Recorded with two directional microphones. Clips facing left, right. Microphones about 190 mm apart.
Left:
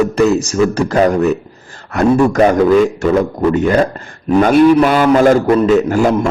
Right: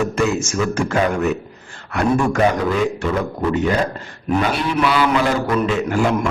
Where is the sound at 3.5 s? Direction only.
50° left (ahead or behind).